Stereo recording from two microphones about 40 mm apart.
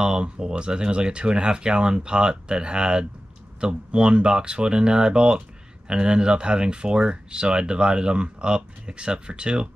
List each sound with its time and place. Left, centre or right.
0.0 s speech: centre